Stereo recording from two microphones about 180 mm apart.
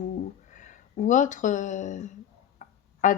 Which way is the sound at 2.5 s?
45° left (ahead or behind).